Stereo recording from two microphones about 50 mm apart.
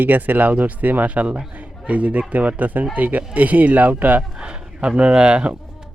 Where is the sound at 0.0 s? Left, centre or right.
Right.